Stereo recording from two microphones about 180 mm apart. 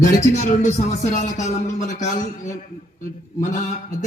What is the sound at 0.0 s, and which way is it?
Speech, 40° left (ahead or behind).